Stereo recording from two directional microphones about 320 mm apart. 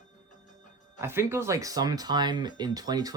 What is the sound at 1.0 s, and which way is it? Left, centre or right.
Speech, centre.